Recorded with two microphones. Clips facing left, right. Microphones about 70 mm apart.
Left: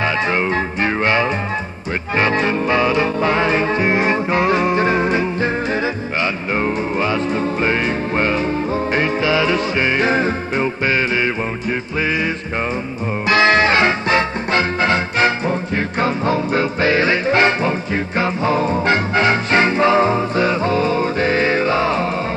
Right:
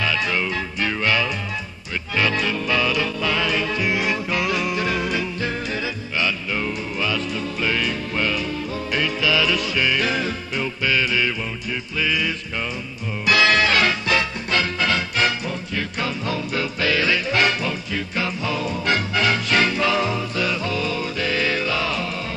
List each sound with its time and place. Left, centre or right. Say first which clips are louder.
0.0 s music: left 5 dB; left
13.3 s music: left 4 dB; left